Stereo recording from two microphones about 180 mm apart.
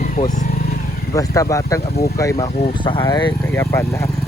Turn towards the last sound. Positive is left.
turn(degrees=15)  # may be behind; listen again after turning